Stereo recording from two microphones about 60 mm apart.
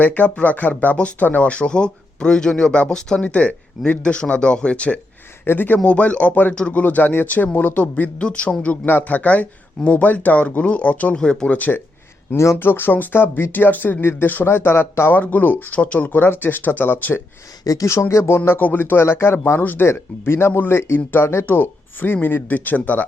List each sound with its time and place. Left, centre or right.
0.0 s speech: left
5.5 s speech: left
6.5 s speech: centre
6.7 s speech: left
8.9 s speech: left
11.2 s speech: centre
12.5 s speech: left
15.1 s speech: left
17.6 s speech: left
17.8 s speech: left